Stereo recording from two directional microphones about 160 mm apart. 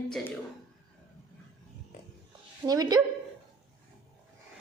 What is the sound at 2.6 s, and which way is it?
Speech, 25° right (ahead or behind).